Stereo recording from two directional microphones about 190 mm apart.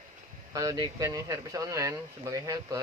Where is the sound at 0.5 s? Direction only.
20° right (ahead or behind).